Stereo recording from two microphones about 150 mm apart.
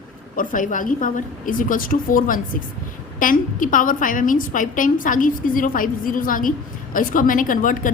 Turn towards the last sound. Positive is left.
turn(degrees=65)  # may be behind; listen again after turning